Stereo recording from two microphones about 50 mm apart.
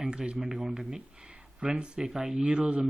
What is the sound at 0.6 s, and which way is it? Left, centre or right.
Speech, centre.